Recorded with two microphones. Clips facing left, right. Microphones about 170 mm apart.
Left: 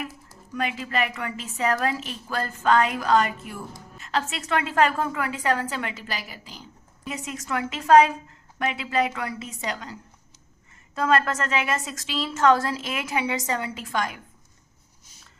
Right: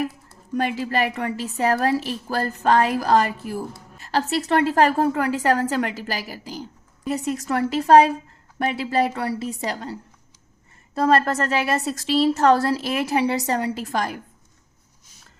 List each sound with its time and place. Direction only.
0.5 s a woman's voice: 35° right (ahead or behind)